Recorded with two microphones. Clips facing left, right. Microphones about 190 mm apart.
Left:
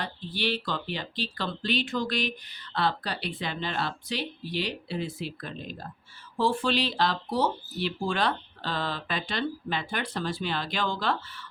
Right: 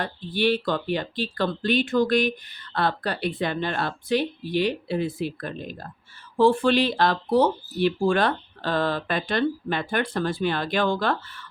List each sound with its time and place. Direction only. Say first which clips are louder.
0.0 s speech: right 7 dB; 50° right (ahead or behind)